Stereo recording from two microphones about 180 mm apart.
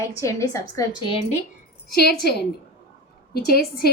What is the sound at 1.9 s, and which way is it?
A woman's voice, 60° left (ahead or behind).